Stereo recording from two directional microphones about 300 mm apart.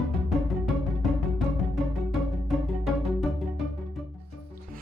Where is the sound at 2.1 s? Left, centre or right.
Centre.